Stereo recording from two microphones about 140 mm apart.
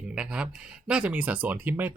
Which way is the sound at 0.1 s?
5° right (ahead or behind).